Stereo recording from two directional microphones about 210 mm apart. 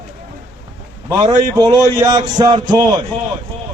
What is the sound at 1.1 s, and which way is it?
A man's voice, 20° right (ahead or behind).